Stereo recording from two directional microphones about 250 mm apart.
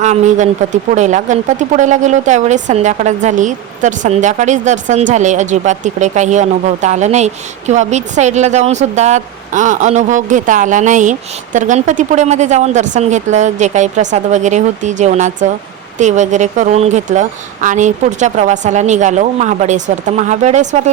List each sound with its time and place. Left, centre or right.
0.0 s speech: right